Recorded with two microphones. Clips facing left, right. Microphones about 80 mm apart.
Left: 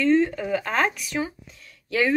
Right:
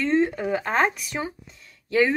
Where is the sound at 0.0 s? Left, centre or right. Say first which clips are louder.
Left 2 dB; right.